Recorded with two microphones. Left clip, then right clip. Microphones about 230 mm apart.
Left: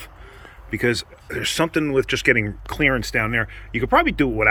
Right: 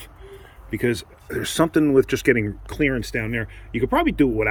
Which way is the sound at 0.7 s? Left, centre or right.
Centre.